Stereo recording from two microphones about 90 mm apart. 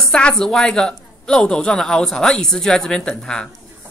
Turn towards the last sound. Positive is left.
turn(degrees=10)  # may be behind; listen again after turning